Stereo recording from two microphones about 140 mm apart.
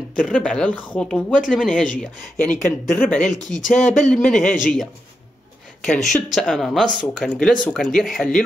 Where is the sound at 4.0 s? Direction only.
5° left (ahead or behind).